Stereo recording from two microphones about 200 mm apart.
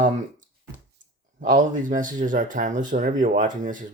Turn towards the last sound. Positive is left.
turn(degrees=-40)  # may be behind; listen again after turning